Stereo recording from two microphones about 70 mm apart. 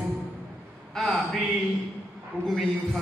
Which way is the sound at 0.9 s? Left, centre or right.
Centre.